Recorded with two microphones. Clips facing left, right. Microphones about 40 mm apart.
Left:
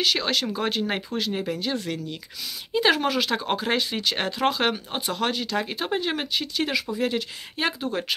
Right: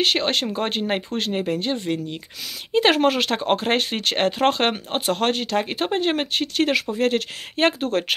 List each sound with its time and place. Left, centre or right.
0.0 s speech: right
2.7 s speech: right